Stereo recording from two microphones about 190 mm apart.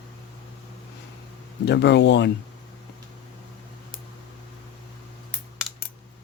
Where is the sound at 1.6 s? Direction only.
65° left (ahead or behind).